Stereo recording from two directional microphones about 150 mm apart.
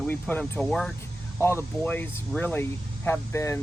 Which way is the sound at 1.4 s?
15° left (ahead or behind).